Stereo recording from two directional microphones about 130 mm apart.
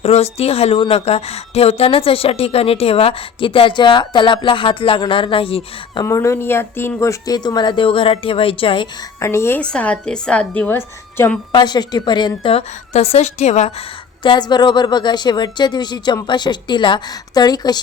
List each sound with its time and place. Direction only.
0.0 s a woman's voice: 55° left (ahead or behind)
6.0 s speech: 25° left (ahead or behind); by 8.9 s 40° left (ahead or behind)
9.2 s a woman's voice: 20° left (ahead or behind)
9.6 s a woman's voice: 10° left (ahead or behind)
11.5 s speech: 35° left (ahead or behind)
12.4 s a woman's voice: 45° left (ahead or behind)
14.3 s speech: 35° left (ahead or behind)